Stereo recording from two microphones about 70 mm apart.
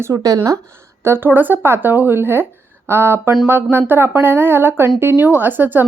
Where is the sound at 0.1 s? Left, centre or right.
Right.